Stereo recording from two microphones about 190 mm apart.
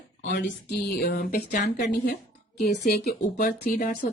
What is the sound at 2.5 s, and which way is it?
A woman's voice, 60° left (ahead or behind).